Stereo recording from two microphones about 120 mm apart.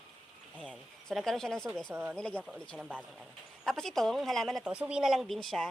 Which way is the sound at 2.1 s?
10° left (ahead or behind).